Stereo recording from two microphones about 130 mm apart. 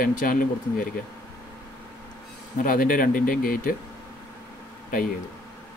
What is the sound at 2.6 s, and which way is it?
Speech, 90° left.